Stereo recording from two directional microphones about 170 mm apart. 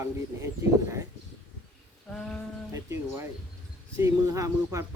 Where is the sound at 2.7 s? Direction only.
15° right (ahead or behind).